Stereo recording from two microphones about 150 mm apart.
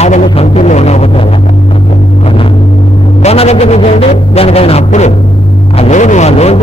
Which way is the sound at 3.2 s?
45° left (ahead or behind).